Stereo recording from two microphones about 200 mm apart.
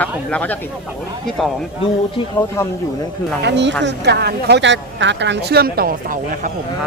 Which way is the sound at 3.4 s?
60° right (ahead or behind).